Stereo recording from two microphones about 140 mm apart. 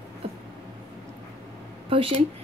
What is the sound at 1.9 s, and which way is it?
Speech, 40° right (ahead or behind).